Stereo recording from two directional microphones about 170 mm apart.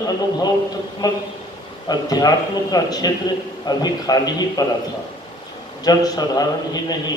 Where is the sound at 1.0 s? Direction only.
25° left (ahead or behind).